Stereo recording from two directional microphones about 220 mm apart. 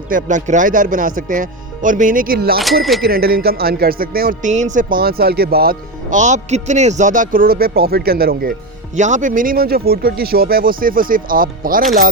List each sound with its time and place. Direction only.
0.1 s speech: 35° right (ahead or behind)